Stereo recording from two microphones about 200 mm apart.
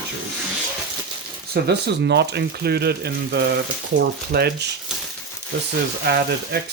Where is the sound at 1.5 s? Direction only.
55° right (ahead or behind).